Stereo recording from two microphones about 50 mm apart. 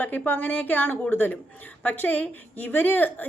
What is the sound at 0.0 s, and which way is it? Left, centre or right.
A woman's voice, left.